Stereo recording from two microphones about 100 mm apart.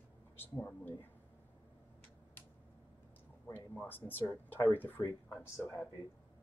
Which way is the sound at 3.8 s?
15° left (ahead or behind).